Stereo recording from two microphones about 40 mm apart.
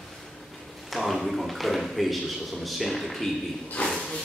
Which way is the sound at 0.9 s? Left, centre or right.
Centre.